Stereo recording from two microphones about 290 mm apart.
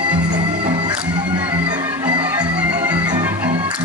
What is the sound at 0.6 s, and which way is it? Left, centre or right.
Music, centre.